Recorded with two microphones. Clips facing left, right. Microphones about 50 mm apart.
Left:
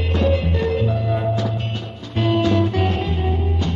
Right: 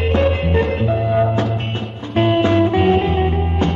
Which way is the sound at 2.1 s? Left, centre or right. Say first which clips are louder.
Right 4 dB; right.